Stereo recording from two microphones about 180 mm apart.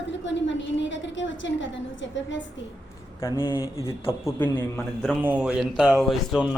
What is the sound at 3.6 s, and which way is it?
A man's voice, 15° left (ahead or behind).